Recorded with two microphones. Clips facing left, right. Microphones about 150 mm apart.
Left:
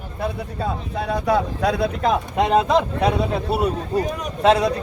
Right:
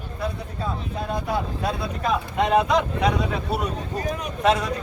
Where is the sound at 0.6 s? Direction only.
75° left (ahead or behind).